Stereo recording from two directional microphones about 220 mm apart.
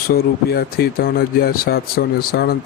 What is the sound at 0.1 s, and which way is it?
Speech, 45° left (ahead or behind).